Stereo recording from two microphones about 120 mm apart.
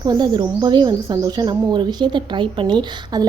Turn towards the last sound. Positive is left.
turn(degrees=-35)  # may be behind; listen again after turning